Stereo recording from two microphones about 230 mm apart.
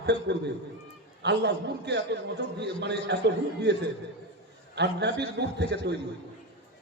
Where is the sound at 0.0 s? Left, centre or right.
Right.